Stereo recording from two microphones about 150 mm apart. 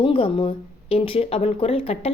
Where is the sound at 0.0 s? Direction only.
35° left (ahead or behind).